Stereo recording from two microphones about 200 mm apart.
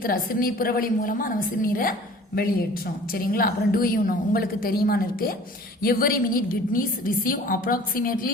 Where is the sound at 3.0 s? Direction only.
45° left (ahead or behind).